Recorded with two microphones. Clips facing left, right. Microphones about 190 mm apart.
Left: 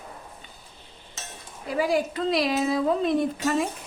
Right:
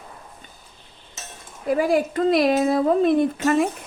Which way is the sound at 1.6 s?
50° right (ahead or behind).